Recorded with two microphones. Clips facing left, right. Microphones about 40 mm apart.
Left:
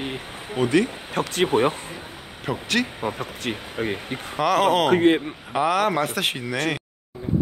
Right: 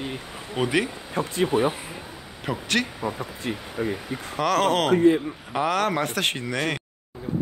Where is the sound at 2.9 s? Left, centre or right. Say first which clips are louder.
Left 2 dB; left.